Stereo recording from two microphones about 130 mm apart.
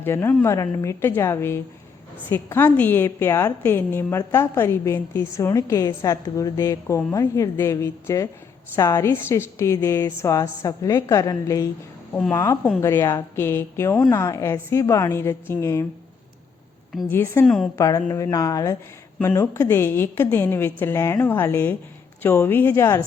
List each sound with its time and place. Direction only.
0.0 s a woman's voice: 20° left (ahead or behind)
17.1 s a woman's voice: 20° left (ahead or behind)
17.4 s a woman's voice: centre (ahead or behind)
17.7 s a woman's voice: 25° left (ahead or behind)